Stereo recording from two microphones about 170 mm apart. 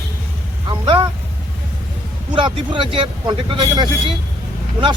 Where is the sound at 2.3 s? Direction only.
30° right (ahead or behind).